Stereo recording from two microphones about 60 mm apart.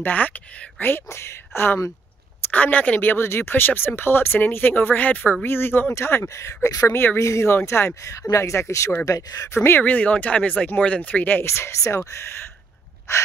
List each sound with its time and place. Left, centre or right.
0.0 s speech: left
1.1 s speech: left
2.5 s speech: left
6.2 s speech: left
8.0 s speech: left
9.0 s speech: left
9.5 s speech: left
9.8 s speech: left
11.4 s speech: left